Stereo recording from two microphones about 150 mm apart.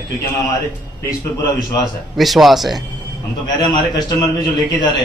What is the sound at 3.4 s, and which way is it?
Speech, 30° left (ahead or behind).